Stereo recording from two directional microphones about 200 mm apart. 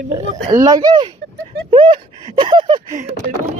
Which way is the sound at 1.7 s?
25° right (ahead or behind).